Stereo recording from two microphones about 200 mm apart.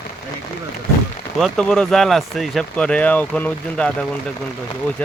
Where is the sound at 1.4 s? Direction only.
5° left (ahead or behind).